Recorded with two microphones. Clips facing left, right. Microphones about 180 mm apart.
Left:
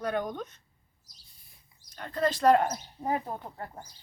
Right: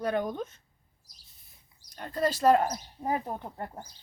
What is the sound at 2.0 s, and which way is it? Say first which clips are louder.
Speech: even; 10° right (ahead or behind).